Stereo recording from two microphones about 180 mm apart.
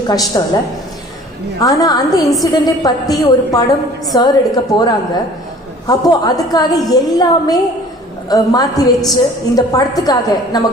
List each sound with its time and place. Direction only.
0.3 s a woman's voice: 20° left (ahead or behind)
1.6 s a woman's voice: 20° left (ahead or behind)